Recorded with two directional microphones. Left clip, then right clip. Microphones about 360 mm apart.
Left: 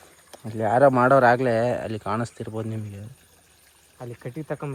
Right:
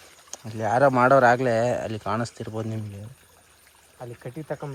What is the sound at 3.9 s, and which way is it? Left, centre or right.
Speech, left.